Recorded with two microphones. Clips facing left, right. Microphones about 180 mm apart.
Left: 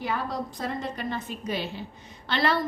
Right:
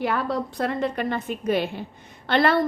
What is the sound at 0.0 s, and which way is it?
A woman's voice, 65° right (ahead or behind).